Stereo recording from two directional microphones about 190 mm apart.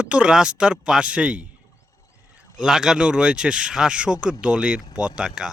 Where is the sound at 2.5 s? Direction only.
5° right (ahead or behind).